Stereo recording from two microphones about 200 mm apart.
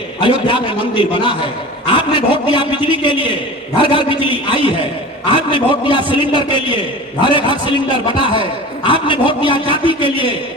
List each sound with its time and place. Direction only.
0.2 s a man's voice: 25° left (ahead or behind)
8.9 s a man's voice: 25° left (ahead or behind)